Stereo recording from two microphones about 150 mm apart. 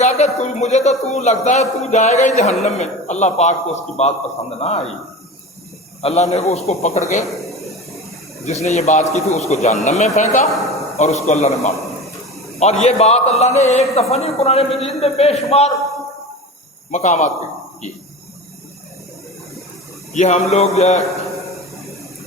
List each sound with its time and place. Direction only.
0.0 s a sound: 50° left (ahead or behind)
1.1 s a man's voice: 50° left (ahead or behind)
6.0 s a man's voice: 45° left (ahead or behind)
7.3 s speech: centre (ahead or behind)
8.6 s a man's voice: 50° left (ahead or behind)
10.5 s a woman's voice: centre (ahead or behind)
10.9 s a man's voice: 45° left (ahead or behind)
11.8 s a sound: centre (ahead or behind)
12.5 s a man's voice: 45° left (ahead or behind)
16.9 s a man's voice: 55° left (ahead or behind)
20.1 s a man's voice: 50° left (ahead or behind)